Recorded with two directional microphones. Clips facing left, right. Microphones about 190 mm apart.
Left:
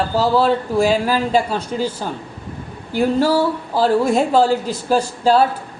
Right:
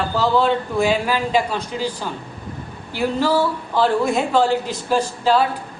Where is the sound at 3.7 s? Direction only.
40° left (ahead or behind).